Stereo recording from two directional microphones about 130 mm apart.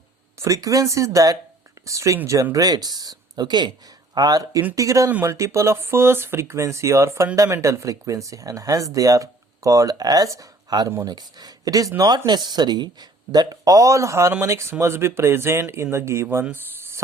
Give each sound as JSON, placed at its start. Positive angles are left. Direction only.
{"t": 0.3, "sound": "speech", "side_deg": -25}